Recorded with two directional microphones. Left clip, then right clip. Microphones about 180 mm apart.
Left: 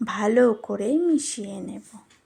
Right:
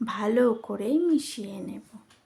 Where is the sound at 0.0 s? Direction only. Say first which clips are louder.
Left 4 dB; 20° left (ahead or behind).